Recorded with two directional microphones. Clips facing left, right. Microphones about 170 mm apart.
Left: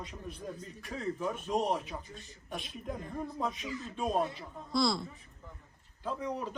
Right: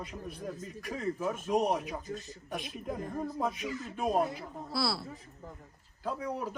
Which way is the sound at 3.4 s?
5° right (ahead or behind).